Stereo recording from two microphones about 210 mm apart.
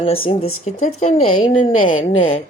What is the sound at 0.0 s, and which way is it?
Speech, 25° left (ahead or behind).